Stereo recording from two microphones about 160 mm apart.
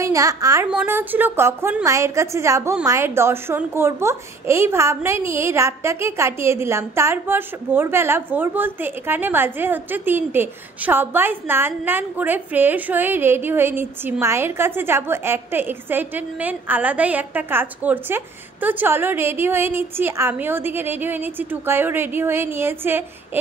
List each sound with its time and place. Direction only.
0.0 s a woman's voice: 20° right (ahead or behind)
0.7 s a child's voice: 10° right (ahead or behind)